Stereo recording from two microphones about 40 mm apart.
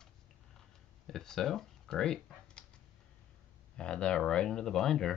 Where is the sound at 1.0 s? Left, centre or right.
Centre.